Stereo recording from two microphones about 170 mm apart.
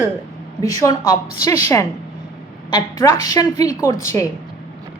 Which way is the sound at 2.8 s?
20° left (ahead or behind).